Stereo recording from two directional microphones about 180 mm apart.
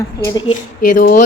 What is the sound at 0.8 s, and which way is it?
Speech, 50° left (ahead or behind).